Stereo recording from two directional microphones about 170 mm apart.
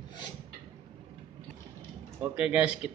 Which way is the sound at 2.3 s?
5° right (ahead or behind).